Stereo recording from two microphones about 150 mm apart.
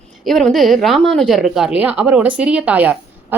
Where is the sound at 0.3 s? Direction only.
Centre (ahead or behind).